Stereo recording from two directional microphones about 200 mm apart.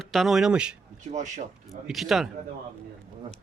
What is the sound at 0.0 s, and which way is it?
Speech, centre (ahead or behind).